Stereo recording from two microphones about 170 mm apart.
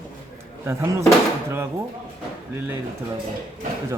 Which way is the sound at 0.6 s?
15° right (ahead or behind).